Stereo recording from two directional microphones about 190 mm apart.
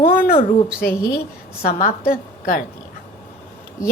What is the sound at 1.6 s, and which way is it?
A woman's voice, 50° left (ahead or behind).